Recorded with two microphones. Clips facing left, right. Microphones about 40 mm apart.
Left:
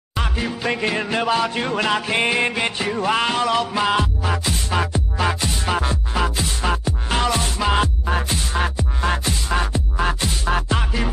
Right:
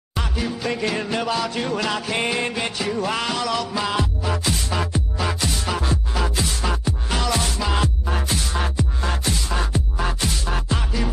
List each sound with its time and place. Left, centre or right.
0.2 s music: left
4.7 s music: left